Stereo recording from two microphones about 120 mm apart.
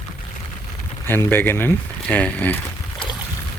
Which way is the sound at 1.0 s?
15° left (ahead or behind).